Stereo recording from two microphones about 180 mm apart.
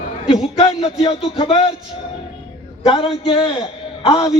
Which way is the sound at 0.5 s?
30° left (ahead or behind).